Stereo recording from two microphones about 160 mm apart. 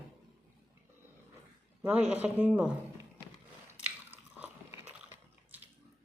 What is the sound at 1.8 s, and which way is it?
Speech, 10° right (ahead or behind).